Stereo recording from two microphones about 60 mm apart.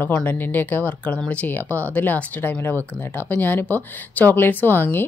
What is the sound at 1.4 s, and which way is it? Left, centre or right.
Speech, left.